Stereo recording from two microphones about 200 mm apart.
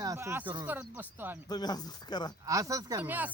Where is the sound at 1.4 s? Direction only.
20° left (ahead or behind).